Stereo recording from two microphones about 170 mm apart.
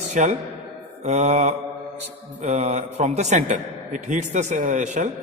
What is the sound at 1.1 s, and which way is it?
Mantra, 40° right (ahead or behind).